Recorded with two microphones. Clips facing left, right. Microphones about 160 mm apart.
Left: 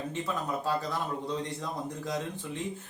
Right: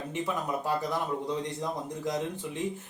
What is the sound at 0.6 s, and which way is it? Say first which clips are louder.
A man's voice: right 1 dB; 15° right (ahead or behind).